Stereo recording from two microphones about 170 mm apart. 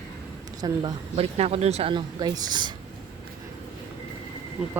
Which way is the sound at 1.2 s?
35° right (ahead or behind).